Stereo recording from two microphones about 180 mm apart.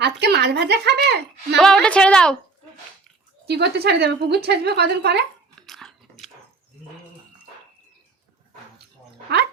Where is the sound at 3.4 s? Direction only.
65° right (ahead or behind).